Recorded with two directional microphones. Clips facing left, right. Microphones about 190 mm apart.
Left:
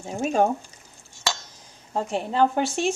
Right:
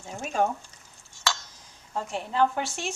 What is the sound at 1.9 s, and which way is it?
A woman's voice, 25° left (ahead or behind).